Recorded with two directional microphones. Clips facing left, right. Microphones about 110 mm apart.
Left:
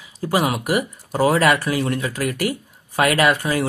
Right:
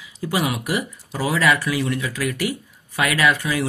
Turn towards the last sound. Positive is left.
turn(degrees=45)  # may be behind; listen again after turning